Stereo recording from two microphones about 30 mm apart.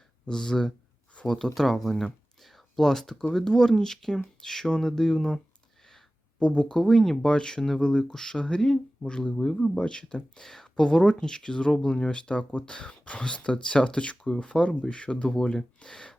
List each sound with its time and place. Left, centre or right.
0.3 s speech: left
1.5 s speech: centre
2.4 s a sound: centre
3.3 s speech: centre
6.4 s speech: left
6.7 s speech: centre
7.8 s speech: left
8.1 s speech: centre
8.4 s speech: left
9.4 s speech: centre
9.7 s speech: left
10.4 s speech: centre
10.8 s speech: left
15.3 s speech: left